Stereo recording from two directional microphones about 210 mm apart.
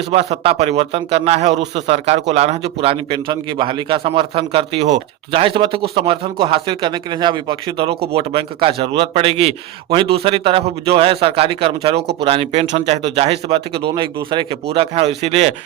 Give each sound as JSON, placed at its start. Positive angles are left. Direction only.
{"t": 0.1, "sound": "a man's voice", "side_deg": -30}